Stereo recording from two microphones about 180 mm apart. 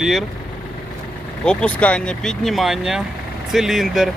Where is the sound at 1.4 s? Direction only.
5° left (ahead or behind).